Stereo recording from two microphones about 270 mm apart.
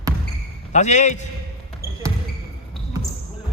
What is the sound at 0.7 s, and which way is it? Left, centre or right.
Speech, left.